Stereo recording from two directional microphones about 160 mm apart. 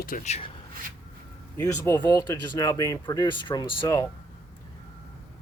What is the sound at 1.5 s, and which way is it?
Speech, 15° left (ahead or behind).